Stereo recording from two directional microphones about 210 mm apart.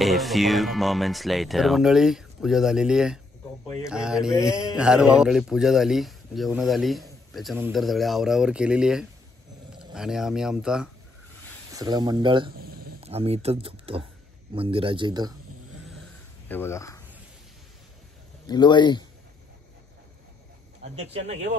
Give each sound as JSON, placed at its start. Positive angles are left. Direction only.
{"t": 0.0, "sound": "speech", "side_deg": 0}
{"t": 3.6, "sound": "speech", "side_deg": 15}
{"t": 3.9, "sound": "speech", "side_deg": -5}
{"t": 11.7, "sound": "speech", "side_deg": -20}
{"t": 12.5, "sound": "a sound", "side_deg": -45}
{"t": 13.0, "sound": "speech", "side_deg": -30}
{"t": 16.0, "sound": "a sound", "side_deg": 10}
{"t": 18.5, "sound": "speech", "side_deg": 20}
{"t": 20.8, "sound": "speech", "side_deg": -30}